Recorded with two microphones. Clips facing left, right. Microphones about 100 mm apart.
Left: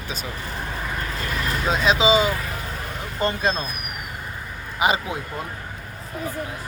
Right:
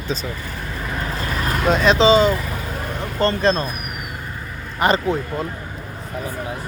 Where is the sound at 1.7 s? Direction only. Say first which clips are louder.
Right 5 dB; 5° left (ahead or behind).